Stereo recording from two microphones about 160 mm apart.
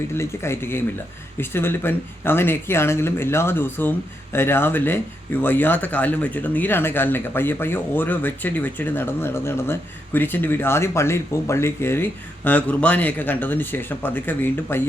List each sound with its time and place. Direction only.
0.2 s speech: 15° left (ahead or behind)